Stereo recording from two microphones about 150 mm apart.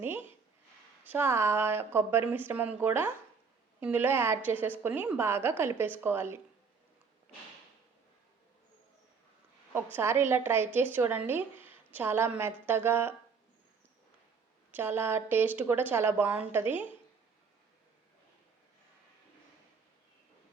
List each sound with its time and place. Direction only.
0.0 s a woman's voice: 15° right (ahead or behind)
9.7 s a woman's voice: 15° right (ahead or behind)
14.7 s a woman's voice: 15° right (ahead or behind)